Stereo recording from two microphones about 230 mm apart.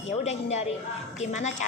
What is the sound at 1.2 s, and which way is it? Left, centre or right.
Speech, left.